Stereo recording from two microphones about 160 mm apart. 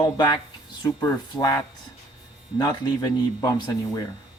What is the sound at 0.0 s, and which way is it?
A man's voice, 25° left (ahead or behind).